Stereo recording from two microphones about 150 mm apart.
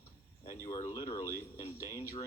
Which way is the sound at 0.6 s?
20° left (ahead or behind).